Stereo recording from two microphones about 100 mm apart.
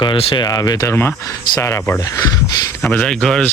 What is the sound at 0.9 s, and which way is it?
Speech, 25° left (ahead or behind).